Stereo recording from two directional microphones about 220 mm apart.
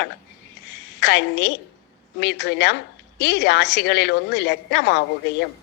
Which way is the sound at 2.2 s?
50° left (ahead or behind).